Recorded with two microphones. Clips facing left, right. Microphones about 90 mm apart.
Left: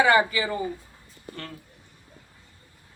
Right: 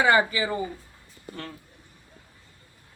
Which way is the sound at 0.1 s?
25° right (ahead or behind).